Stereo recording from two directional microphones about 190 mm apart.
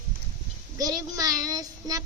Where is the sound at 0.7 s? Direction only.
20° right (ahead or behind).